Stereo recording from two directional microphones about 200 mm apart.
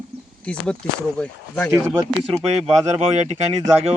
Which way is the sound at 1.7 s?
15° right (ahead or behind).